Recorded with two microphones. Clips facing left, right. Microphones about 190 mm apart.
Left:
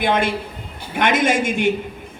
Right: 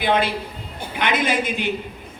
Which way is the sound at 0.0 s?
50° left (ahead or behind).